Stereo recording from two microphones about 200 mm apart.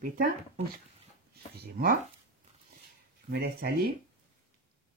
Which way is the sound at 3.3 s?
50° right (ahead or behind).